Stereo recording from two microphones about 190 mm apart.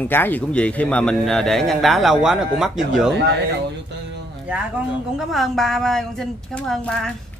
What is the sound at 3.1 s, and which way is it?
Speech, 65° right (ahead or behind).